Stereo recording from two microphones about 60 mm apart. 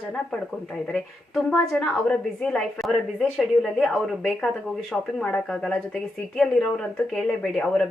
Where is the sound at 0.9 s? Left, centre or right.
Centre.